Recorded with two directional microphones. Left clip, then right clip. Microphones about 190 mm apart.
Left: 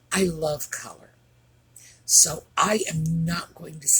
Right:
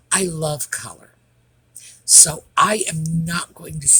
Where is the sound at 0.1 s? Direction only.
45° right (ahead or behind).